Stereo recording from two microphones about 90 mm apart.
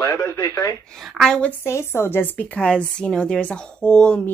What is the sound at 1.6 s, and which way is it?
A woman's voice, 30° left (ahead or behind).